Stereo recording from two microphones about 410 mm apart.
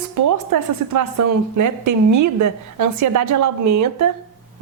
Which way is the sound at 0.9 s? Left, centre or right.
Right.